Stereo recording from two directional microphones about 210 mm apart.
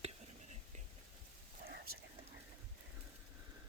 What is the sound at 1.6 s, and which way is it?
Whispering, 45° right (ahead or behind).